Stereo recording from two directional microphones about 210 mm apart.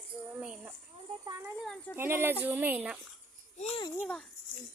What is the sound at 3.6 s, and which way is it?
Speech, 30° left (ahead or behind).